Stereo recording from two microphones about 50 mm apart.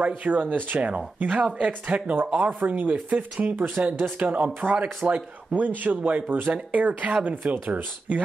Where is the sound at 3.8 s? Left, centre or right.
Right.